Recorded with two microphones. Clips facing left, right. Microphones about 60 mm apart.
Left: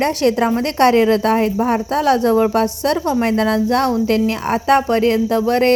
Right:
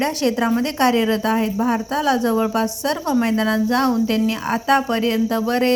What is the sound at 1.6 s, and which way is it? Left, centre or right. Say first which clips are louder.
A woman's voice: left 3 dB; left.